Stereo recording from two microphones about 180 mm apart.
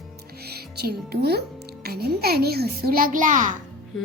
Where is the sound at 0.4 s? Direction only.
60° right (ahead or behind); by 3.5 s 45° right (ahead or behind).